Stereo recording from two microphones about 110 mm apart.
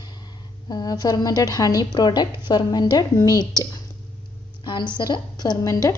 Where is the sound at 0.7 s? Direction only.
35° left (ahead or behind).